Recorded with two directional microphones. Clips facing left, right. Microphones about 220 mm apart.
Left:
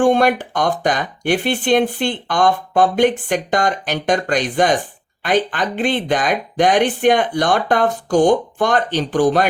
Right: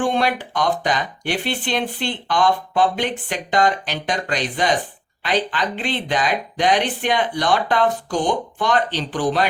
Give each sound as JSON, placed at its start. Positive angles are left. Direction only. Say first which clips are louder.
{"t": 0.0, "sound": "speech", "louder": "left 6 dB", "side_deg": 45}